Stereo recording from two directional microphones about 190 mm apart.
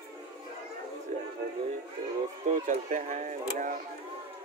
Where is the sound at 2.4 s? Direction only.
40° right (ahead or behind).